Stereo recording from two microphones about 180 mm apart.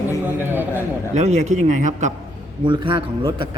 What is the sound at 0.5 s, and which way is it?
Speech, 10° right (ahead or behind).